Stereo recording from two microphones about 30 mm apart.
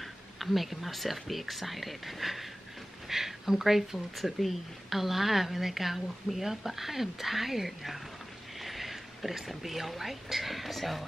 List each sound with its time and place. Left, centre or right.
0.0 s a woman's voice: centre